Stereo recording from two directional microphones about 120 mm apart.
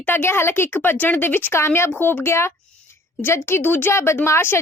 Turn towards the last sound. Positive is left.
turn(degrees=20)  # may be behind; listen again after turning